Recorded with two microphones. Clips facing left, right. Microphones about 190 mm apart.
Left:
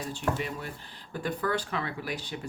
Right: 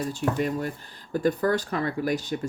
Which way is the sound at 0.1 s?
40° right (ahead or behind).